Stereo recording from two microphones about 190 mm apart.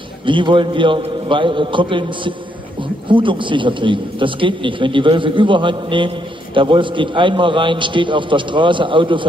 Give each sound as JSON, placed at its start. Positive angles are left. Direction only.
{"t": 0.2, "sound": "speech", "side_deg": -25}